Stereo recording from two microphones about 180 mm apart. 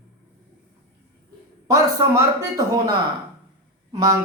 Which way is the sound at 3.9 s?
20° right (ahead or behind).